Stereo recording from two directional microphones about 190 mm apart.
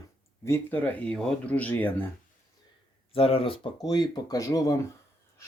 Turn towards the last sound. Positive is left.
turn(degrees=20)  # may be behind; listen again after turning